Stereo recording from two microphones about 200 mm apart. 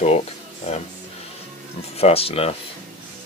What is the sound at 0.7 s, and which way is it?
Music, 35° left (ahead or behind).